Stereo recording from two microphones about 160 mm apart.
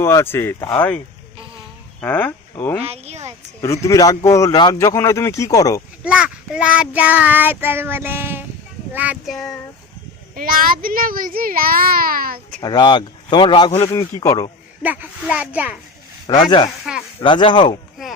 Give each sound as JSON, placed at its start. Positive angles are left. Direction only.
{"t": 0.0, "sound": "speech", "side_deg": 15}
{"t": 2.8, "sound": "speech", "side_deg": -40}
{"t": 3.6, "sound": "speech", "side_deg": 20}
{"t": 6.0, "sound": "child singing", "side_deg": -5}
{"t": 10.3, "sound": "a child's voice", "side_deg": -65}
{"t": 12.6, "sound": "speech", "side_deg": 25}
{"t": 13.8, "sound": "speech", "side_deg": 25}
{"t": 14.8, "sound": "child singing", "side_deg": -10}
{"t": 16.4, "sound": "speech", "side_deg": 30}